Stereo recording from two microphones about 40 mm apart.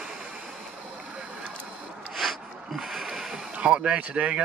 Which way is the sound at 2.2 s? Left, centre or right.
Centre.